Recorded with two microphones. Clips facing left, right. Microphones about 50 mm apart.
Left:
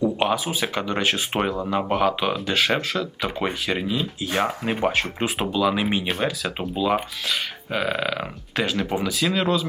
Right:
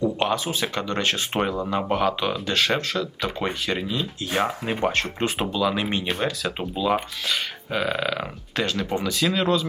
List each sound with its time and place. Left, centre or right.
0.0 s speech: centre